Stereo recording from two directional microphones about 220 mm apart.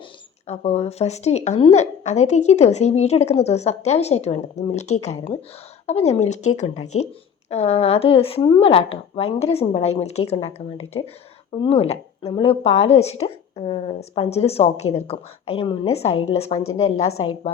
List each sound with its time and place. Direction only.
0.4 s a woman's voice: 30° left (ahead or behind)
7.5 s a woman's voice: 30° left (ahead or behind)